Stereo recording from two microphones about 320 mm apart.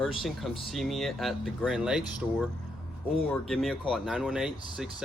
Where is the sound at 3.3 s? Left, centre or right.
Centre.